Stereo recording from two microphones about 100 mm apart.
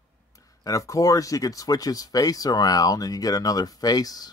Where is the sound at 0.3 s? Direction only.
35° left (ahead or behind).